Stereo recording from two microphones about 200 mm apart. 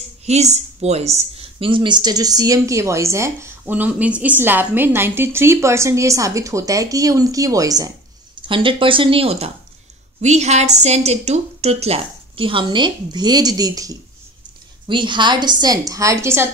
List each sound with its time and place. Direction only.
0.2 s a woman's voice: 35° right (ahead or behind); by 16.4 s 15° right (ahead or behind)